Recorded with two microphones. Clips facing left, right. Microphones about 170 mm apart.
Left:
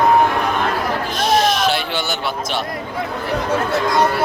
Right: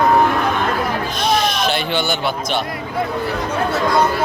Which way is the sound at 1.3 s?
5° left (ahead or behind).